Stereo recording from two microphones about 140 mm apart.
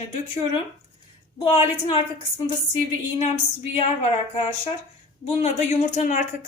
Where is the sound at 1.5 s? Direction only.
45° left (ahead or behind).